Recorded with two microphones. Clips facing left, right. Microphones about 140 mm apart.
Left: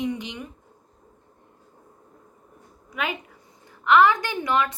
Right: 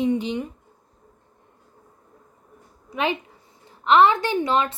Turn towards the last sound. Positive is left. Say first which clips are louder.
# right 3 dB
turn(degrees=-30)  # may be behind; listen again after turning